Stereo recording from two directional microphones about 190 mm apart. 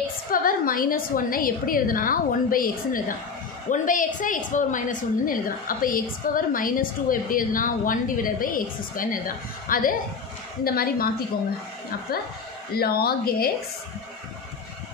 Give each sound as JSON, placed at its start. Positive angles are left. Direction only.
{"t": 0.3, "sound": "a woman's voice", "side_deg": 50}
{"t": 12.7, "sound": "a woman's voice", "side_deg": 55}